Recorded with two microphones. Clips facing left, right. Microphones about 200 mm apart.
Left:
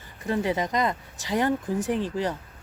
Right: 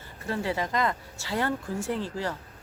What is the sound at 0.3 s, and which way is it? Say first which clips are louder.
Speech: left 4 dB; 20° left (ahead or behind).